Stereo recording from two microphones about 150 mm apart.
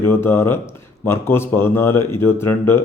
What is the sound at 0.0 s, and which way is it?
A man's voice, 15° left (ahead or behind).